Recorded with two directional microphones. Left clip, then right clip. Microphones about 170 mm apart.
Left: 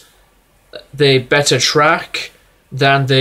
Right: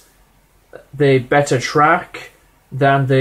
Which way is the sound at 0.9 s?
15° left (ahead or behind).